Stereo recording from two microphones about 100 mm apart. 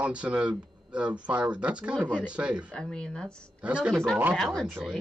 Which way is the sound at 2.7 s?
10° left (ahead or behind).